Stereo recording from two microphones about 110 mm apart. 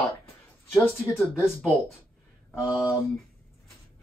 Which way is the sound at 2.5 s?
5° right (ahead or behind).